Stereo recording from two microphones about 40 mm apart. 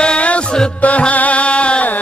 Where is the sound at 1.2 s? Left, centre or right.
Left.